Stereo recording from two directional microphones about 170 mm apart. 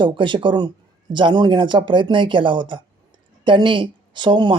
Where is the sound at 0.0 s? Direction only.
30° right (ahead or behind).